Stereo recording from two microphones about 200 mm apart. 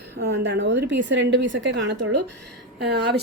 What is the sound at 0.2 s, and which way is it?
A woman's voice, 55° right (ahead or behind).